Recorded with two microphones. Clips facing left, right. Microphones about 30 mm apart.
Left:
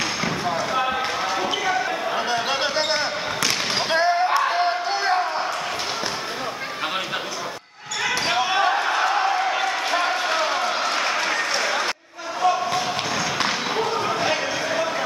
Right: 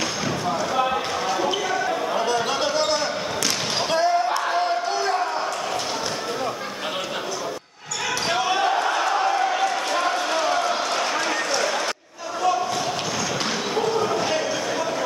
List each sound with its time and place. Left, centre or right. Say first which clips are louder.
0.2 s basketball bounce: left 1 dB; centre
4.3 s crowd: left 2 dB; left
8.1 s basketball bounce: left 1 dB; centre
13.4 s basketball bounce: even; centre